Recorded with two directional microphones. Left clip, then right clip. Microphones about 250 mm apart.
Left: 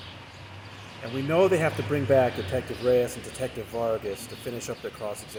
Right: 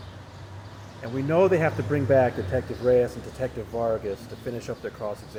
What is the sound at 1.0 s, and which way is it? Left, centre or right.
Speech, left.